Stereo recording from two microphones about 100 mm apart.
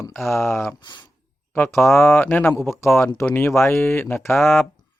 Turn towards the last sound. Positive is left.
turn(degrees=5)  # may be behind; listen again after turning